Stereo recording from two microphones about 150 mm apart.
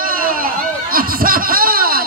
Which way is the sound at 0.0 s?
70° right (ahead or behind).